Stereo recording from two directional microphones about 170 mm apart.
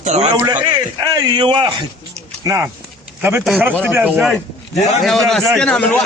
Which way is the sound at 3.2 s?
15° right (ahead or behind).